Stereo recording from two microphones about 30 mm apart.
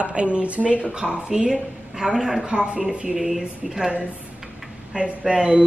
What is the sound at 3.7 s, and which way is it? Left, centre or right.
Speech, right.